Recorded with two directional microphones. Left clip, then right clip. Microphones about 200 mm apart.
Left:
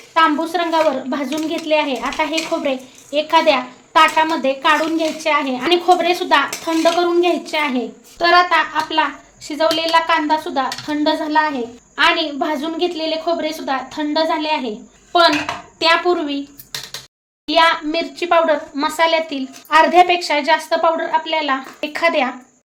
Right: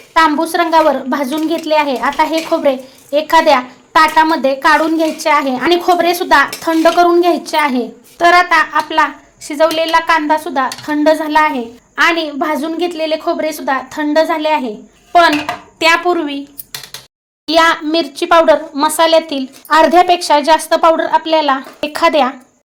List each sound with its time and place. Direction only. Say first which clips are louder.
0.1 s a woman's voice: right 4 dB; 35° right (ahead or behind)
15.8 s speech: right 3 dB; 25° right (ahead or behind)
17.4 s a woman's voice: right 3 dB; 40° right (ahead or behind)